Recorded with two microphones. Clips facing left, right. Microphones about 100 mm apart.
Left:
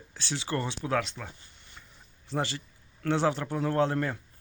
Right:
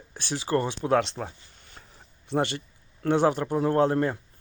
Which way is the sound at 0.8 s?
30° right (ahead or behind).